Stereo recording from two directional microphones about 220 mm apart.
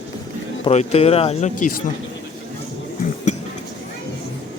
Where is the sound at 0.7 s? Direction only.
30° left (ahead or behind).